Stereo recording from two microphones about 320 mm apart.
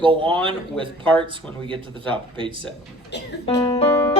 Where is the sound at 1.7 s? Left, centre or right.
Centre.